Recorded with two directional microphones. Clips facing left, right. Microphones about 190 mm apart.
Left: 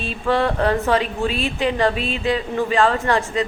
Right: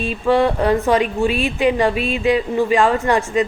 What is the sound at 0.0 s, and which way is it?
A woman's voice, 10° right (ahead or behind).